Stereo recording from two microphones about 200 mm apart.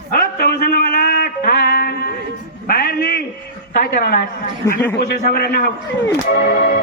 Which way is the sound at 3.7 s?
50° left (ahead or behind).